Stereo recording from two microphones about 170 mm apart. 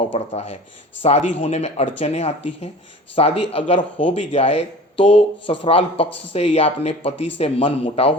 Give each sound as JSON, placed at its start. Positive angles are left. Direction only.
{"t": 0.1, "sound": "speech", "side_deg": 40}